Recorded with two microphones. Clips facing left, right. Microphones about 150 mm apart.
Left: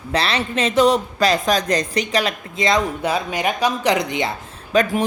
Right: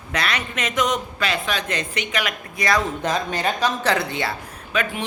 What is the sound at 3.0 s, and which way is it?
Speech, 10° left (ahead or behind).